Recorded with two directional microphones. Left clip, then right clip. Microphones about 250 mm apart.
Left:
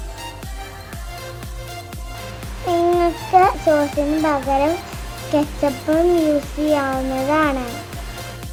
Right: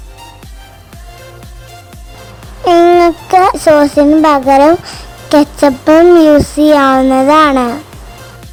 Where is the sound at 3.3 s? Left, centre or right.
Right.